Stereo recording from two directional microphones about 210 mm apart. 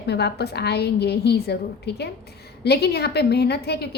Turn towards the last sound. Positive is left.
turn(degrees=50)  # may be behind; listen again after turning